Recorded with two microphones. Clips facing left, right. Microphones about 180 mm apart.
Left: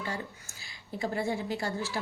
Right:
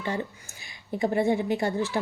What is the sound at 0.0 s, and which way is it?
A woman's voice, 20° right (ahead or behind).